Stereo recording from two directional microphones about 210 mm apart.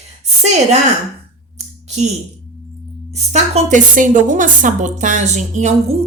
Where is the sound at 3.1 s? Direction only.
30° right (ahead or behind).